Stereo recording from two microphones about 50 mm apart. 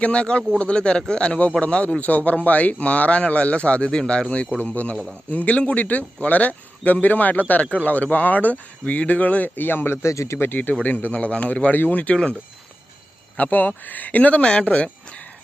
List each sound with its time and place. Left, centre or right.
0.0 s speech: left
10.3 s speech: left
10.8 s speech: left
13.3 s speech: left